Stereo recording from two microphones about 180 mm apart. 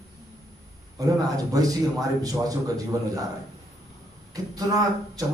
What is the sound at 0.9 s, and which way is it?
A man's voice, 20° right (ahead or behind).